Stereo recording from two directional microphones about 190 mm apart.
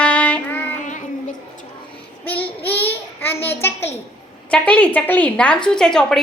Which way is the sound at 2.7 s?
10° left (ahead or behind).